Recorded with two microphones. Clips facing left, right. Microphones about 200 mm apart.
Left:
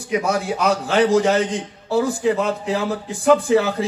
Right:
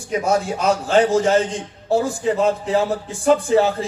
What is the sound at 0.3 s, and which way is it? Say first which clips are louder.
A man's voice: right 3 dB; 60° left (ahead or behind).